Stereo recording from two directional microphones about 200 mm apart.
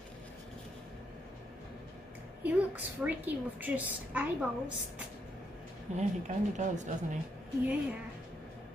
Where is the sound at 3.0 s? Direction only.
10° right (ahead or behind).